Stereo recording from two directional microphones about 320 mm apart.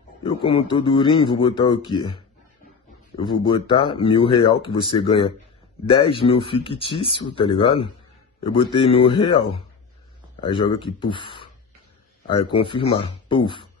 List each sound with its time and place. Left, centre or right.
0.2 s speech: centre